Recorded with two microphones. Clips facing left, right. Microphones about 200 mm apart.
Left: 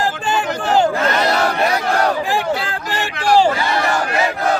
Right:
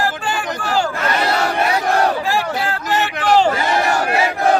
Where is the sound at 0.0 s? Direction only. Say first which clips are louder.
Left 2 dB; 20° left (ahead or behind).